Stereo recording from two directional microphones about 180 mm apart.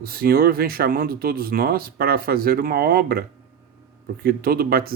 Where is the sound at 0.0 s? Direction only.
55° right (ahead or behind).